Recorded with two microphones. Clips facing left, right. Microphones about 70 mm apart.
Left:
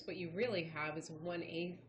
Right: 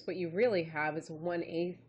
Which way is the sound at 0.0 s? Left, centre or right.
Right.